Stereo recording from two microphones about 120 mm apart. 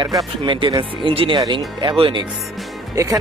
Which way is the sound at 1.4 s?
35° right (ahead or behind).